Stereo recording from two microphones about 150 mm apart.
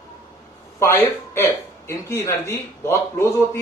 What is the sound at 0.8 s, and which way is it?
Speech, 20° left (ahead or behind).